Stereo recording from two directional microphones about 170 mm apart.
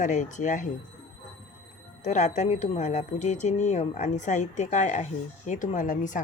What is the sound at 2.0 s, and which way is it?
Speech, 45° left (ahead or behind).